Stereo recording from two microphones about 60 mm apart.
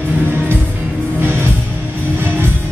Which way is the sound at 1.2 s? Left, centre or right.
Right.